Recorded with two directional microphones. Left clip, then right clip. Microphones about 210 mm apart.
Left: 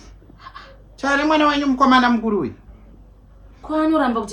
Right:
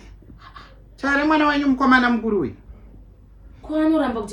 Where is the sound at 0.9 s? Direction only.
55° left (ahead or behind).